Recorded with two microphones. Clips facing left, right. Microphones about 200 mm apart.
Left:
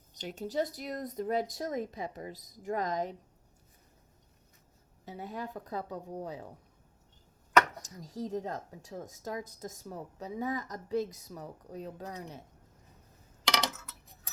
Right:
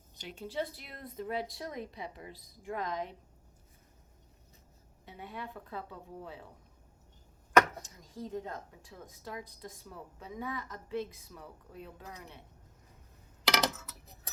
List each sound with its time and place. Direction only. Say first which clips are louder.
0.1 s speech: left 5 dB; 40° left (ahead or behind)
5.0 s a woman's voice: left 4 dB; 40° left (ahead or behind)
7.9 s a woman's voice: left 5 dB; 40° left (ahead or behind)
13.4 s a sound: right 2 dB; 5° right (ahead or behind)